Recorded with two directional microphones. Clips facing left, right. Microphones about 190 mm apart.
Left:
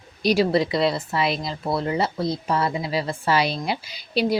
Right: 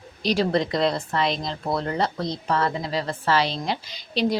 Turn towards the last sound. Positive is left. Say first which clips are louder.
# left 1 dB
turn(degrees=10)  # may be behind; listen again after turning